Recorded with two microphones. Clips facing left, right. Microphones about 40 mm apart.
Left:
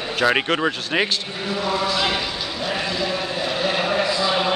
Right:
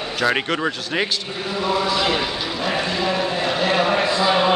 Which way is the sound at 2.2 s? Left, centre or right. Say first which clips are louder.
Right 3 dB; centre.